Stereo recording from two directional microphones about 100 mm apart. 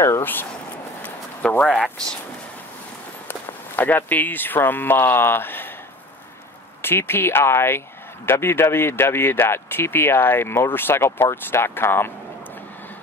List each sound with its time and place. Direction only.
0.0 s speech: 25° left (ahead or behind)
1.0 s clip-clop: 15° left (ahead or behind)
1.7 s speech: 5° left (ahead or behind)
3.3 s speech: 20° left (ahead or behind)
6.8 s speech: 25° left (ahead or behind)